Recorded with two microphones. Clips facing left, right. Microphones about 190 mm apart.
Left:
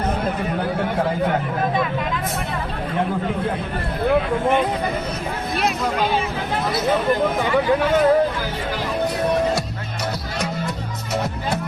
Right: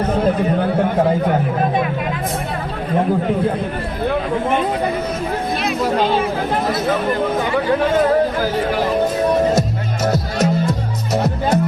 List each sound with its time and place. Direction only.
10.1 s music: 40° right (ahead or behind)